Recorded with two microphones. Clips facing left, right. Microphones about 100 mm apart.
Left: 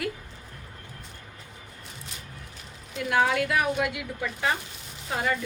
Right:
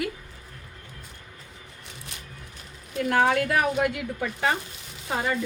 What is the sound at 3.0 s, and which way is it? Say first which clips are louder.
Speech: right 2 dB; 45° right (ahead or behind).